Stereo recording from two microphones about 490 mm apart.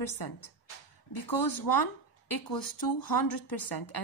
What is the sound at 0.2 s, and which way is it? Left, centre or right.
Speech, left.